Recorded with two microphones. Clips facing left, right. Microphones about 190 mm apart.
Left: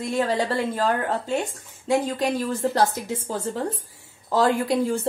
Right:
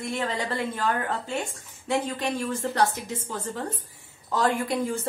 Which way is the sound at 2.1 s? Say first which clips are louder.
Left 4 dB; 35° left (ahead or behind).